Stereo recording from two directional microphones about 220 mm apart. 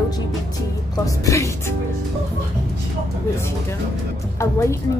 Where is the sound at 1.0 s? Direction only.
15° left (ahead or behind).